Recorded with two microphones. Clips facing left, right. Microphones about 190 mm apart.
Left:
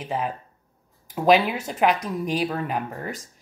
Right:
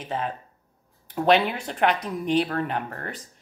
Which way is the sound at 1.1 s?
10° left (ahead or behind).